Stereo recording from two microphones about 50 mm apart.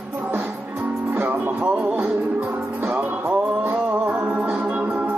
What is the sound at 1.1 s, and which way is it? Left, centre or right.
Music, right.